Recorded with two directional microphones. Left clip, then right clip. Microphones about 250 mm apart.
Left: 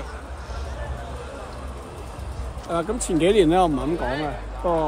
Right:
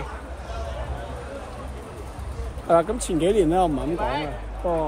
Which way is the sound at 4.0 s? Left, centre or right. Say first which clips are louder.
Even; centre.